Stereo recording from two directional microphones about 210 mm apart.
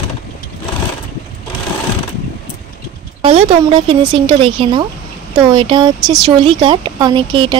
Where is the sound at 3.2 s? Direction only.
25° right (ahead or behind).